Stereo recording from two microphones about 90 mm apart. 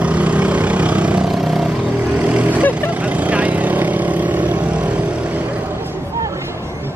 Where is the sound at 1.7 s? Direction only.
15° right (ahead or behind).